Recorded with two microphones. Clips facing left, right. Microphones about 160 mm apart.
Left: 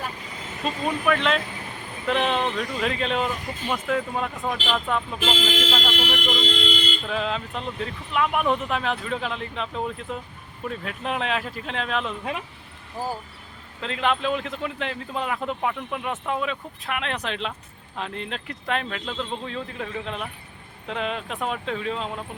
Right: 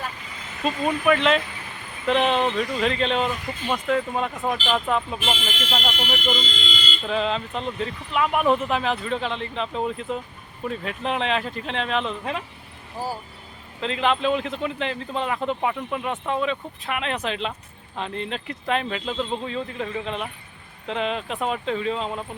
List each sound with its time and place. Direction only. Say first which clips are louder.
0.6 s speech: right 3 dB; centre (ahead or behind)
5.4 s speech: left 6 dB; 90° left
6.1 s speech: left 1 dB; 75° left (ahead or behind)
7.0 s speech: right 3 dB; centre (ahead or behind)
13.8 s speech: right 2 dB; centre (ahead or behind)